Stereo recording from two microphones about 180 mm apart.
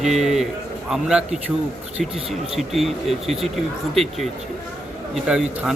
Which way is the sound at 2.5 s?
Centre (ahead or behind).